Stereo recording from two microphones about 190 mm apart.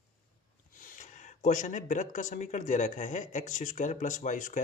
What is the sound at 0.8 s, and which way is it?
Speech, 45° left (ahead or behind).